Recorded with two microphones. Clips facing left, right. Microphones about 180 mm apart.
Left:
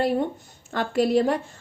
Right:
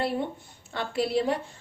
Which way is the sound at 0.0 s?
45° left (ahead or behind).